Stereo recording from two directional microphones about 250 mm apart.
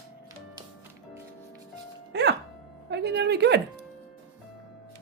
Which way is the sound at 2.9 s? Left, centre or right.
Right.